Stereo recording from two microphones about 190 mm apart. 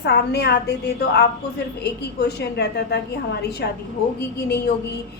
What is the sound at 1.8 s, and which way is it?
A woman's voice, 60° left (ahead or behind).